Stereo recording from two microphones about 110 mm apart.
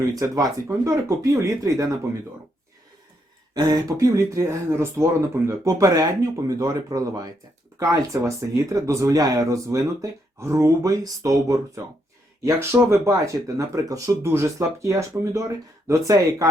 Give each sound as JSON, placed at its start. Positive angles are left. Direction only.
{"t": 0.1, "sound": "speech", "side_deg": -30}
{"t": 3.5, "sound": "speech", "side_deg": -35}